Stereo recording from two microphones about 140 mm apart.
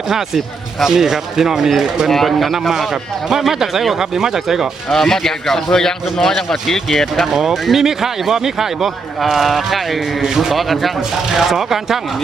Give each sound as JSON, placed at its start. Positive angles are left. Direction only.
{"t": 0.1, "sound": "speech", "side_deg": 0}